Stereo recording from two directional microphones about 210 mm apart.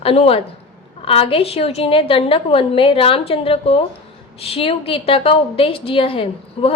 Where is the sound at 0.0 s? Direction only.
30° left (ahead or behind).